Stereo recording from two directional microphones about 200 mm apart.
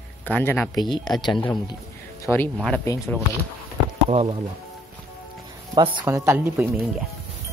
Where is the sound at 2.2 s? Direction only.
10° left (ahead or behind).